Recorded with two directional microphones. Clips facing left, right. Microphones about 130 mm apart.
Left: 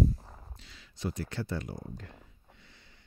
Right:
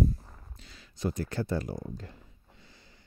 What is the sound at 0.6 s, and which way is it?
Speech, 45° right (ahead or behind).